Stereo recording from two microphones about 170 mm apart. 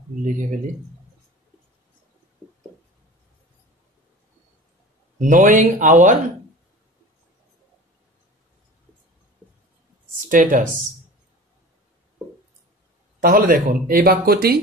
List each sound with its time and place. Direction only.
5.2 s speech: 50° right (ahead or behind)
10.3 s speech: 50° right (ahead or behind)
13.2 s speech: 55° right (ahead or behind)